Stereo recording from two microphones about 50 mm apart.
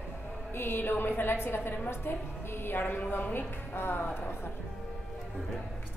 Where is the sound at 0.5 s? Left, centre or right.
Left.